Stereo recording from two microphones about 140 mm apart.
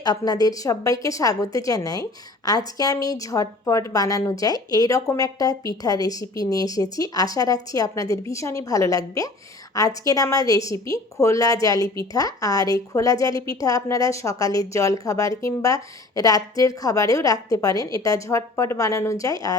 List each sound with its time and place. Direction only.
0.0 s a woman's voice: 30° left (ahead or behind)